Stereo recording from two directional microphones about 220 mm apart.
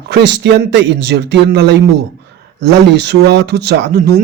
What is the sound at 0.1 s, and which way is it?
Speech, 55° right (ahead or behind).